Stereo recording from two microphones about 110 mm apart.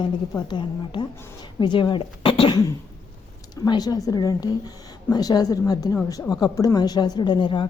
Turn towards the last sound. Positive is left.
turn(degrees=45)  # may be behind; listen again after turning